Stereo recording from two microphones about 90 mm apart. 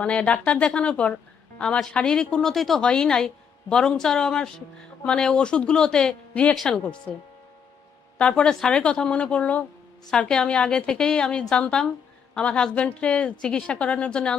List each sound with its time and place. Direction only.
0.0 s a woman's voice: 15° left (ahead or behind)
8.2 s a woman's voice: 10° left (ahead or behind)